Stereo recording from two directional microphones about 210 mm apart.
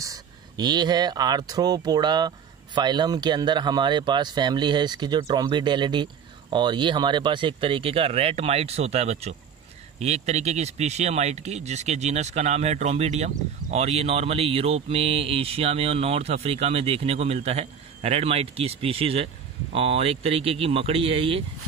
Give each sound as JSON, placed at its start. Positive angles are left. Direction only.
{"t": 0.0, "sound": "speech", "side_deg": -20}